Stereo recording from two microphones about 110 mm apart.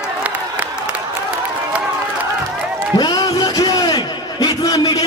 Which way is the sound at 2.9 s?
40° left (ahead or behind).